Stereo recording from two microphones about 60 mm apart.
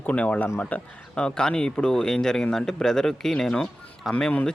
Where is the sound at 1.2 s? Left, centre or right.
Centre.